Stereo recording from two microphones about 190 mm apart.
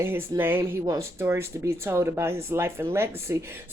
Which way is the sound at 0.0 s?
10° right (ahead or behind).